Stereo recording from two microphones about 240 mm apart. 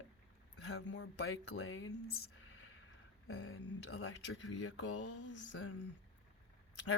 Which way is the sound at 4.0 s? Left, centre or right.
Left.